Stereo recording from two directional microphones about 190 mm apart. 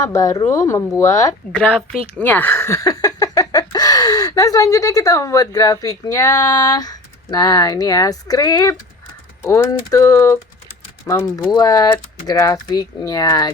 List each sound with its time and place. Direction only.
0.0 s speech: 15° left (ahead or behind)
1.5 s a woman's voice: 5° left (ahead or behind); by 13.5 s 20° left (ahead or behind)